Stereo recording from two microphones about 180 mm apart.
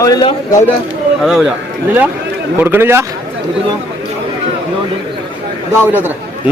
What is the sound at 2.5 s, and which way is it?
Speech, 10° right (ahead or behind).